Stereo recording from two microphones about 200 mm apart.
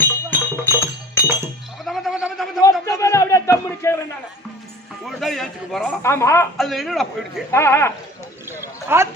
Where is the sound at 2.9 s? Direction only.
15° left (ahead or behind).